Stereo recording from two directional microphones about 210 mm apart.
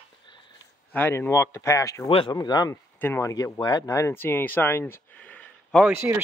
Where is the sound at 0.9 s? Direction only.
10° left (ahead or behind).